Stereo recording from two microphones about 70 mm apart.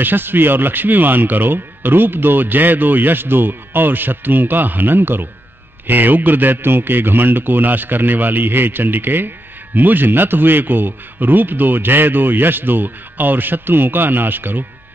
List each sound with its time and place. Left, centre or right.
0.0 s speech: right